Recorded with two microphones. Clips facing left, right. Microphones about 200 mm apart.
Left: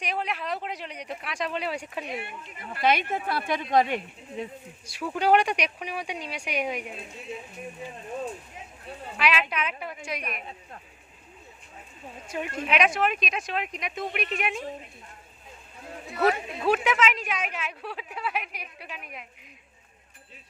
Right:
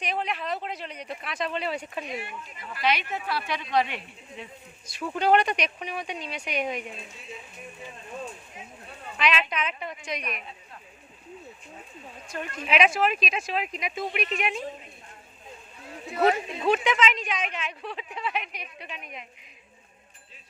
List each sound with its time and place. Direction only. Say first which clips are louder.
0.0 s a woman's voice: right 1 dB; 10° left (ahead or behind)
2.6 s speech: left 3 dB; 50° left (ahead or behind)
4.9 s a woman's voice: even; 10° left (ahead or behind)
9.1 s a woman's voice: even; 10° left (ahead or behind)
12.6 s speech: right 2 dB; 5° right (ahead or behind)
16.0 s speech: right 1 dB; 20° right (ahead or behind)
16.6 s a woman's voice: even; 5° left (ahead or behind)